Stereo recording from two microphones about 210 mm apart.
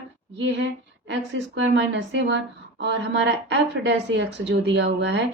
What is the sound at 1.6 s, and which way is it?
A woman's voice, 60° right (ahead or behind).